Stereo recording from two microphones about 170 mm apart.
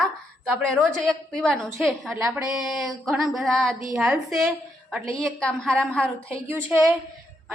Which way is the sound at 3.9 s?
5° right (ahead or behind).